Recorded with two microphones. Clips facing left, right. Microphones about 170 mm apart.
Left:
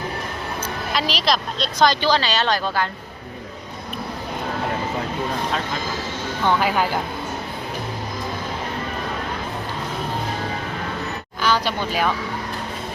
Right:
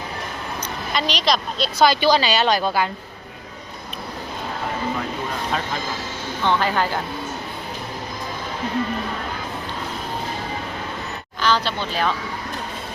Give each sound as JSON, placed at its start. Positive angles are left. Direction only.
{"t": 0.9, "sound": "a woman's voice", "side_deg": 0}
{"t": 6.4, "sound": "speech", "side_deg": 10}
{"t": 11.4, "sound": "speech", "side_deg": 10}